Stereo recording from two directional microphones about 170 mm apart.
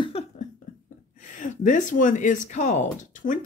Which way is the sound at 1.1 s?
50° left (ahead or behind).